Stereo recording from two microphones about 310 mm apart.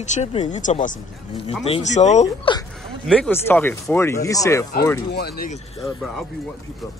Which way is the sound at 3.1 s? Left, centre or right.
Centre.